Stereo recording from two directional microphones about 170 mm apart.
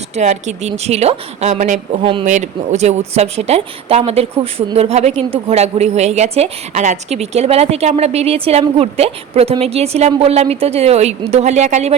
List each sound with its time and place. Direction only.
0.2 s a woman's voice: 45° right (ahead or behind)
2.2 s a woman's voice: 45° right (ahead or behind)